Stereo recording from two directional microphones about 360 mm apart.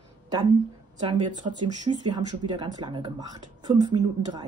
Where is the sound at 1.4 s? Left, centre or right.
Centre.